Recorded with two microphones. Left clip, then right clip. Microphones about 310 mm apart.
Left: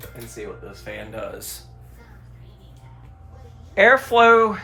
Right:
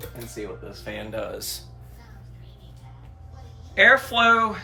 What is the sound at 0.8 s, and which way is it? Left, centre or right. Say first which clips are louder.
Speech: right 1 dB; centre.